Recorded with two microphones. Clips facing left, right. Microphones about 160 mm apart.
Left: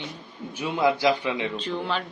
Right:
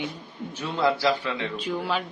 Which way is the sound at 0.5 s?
10° left (ahead or behind).